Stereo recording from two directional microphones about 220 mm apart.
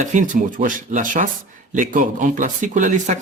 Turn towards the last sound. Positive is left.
turn(degrees=-35)  # may be behind; listen again after turning